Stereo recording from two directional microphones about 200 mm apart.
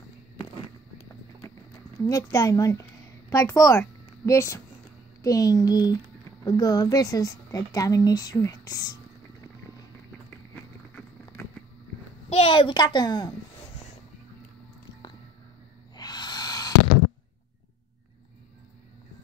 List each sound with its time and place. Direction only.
2.0 s a woman's voice: 20° left (ahead or behind)
12.3 s speech: 30° left (ahead or behind)
16.0 s owl: 20° left (ahead or behind)